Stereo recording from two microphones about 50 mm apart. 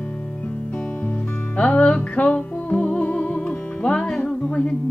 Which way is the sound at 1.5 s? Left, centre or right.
Left.